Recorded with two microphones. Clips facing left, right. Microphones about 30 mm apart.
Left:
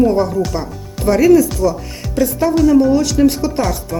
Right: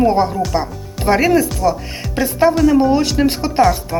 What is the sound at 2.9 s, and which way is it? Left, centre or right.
Speech, right.